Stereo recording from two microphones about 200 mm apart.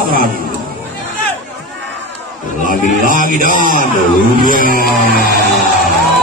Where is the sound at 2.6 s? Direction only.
40° right (ahead or behind).